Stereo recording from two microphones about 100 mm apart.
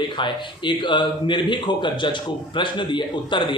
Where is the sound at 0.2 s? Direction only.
50° left (ahead or behind).